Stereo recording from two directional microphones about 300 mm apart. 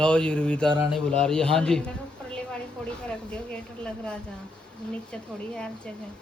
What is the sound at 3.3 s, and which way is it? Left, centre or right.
Speech, centre.